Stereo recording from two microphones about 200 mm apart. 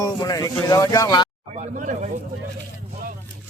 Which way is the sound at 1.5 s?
35° right (ahead or behind).